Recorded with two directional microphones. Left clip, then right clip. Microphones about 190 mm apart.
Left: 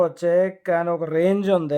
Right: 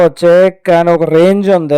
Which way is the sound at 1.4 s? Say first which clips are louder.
Right 10 dB; 35° right (ahead or behind).